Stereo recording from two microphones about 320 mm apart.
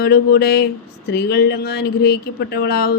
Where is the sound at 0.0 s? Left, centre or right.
Left.